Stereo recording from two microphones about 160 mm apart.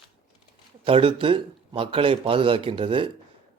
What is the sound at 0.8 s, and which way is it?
Speech, 35° right (ahead or behind).